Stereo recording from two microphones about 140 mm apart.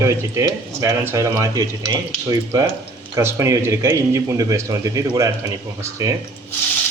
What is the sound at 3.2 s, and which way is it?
A man's voice, 20° right (ahead or behind).